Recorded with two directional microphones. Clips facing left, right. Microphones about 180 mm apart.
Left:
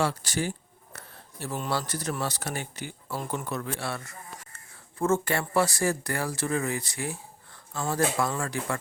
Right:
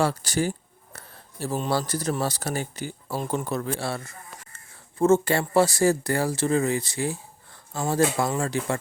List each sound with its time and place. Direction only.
0.0 s speech: 40° right (ahead or behind)